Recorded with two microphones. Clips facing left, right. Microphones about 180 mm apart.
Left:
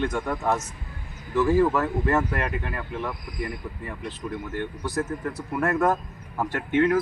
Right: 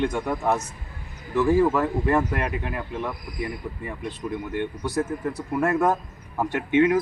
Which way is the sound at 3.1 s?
Centre (ahead or behind).